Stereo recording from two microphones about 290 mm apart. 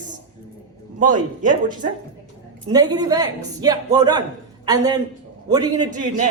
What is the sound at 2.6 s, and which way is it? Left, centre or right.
A man's voice, centre.